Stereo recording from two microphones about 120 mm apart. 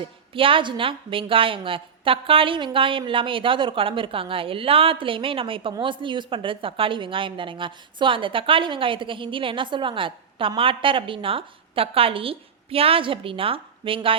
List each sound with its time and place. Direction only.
0.0 s a woman's voice: 45° right (ahead or behind)